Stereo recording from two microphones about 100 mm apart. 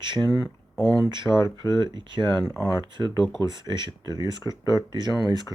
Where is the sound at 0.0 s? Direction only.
50° right (ahead or behind).